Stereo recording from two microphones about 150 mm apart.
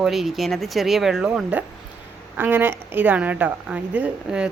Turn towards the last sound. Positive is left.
turn(degrees=-5)  # may be behind; listen again after turning